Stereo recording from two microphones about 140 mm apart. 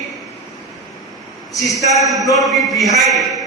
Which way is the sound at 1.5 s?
25° left (ahead or behind).